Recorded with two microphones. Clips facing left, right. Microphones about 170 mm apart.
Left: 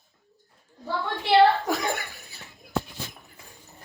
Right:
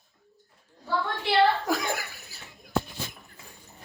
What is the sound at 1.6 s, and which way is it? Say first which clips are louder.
Laughter: left 1 dB; centre (ahead or behind).